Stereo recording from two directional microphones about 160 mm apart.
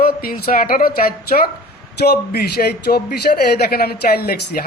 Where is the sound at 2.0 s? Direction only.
75° left (ahead or behind).